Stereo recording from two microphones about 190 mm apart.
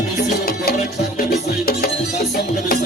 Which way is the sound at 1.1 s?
50° left (ahead or behind).